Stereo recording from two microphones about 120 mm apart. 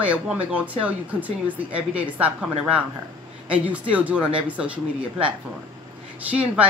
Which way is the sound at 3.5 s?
10° right (ahead or behind).